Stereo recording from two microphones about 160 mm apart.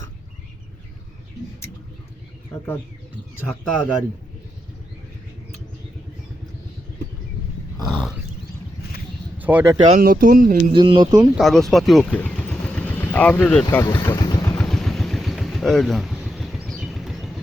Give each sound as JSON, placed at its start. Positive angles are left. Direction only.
{"t": 3.4, "sound": "a man's voice", "side_deg": 10}
{"t": 7.9, "sound": "wild animals", "side_deg": 0}
{"t": 9.4, "sound": "speech", "side_deg": -10}
{"t": 10.0, "sound": "speech", "side_deg": -65}
{"t": 10.7, "sound": "speech", "side_deg": -30}
{"t": 11.3, "sound": "speech", "side_deg": 0}
{"t": 13.7, "sound": "speech", "side_deg": 20}
{"t": 14.2, "sound": "vehicle", "side_deg": 25}
{"t": 14.4, "sound": "vehicle", "side_deg": 5}